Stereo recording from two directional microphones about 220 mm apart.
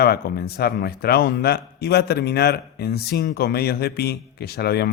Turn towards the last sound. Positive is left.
turn(degrees=45)  # may be behind; listen again after turning